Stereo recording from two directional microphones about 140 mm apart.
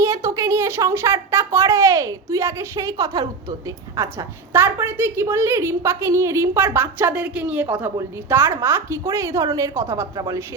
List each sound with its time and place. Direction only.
0.0 s a woman's voice: 20° right (ahead or behind)